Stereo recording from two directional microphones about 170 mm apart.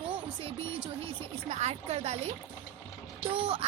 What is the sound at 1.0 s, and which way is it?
Speech, 40° right (ahead or behind).